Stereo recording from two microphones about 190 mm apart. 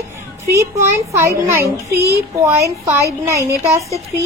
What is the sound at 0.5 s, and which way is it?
A woman's voice, 15° right (ahead or behind).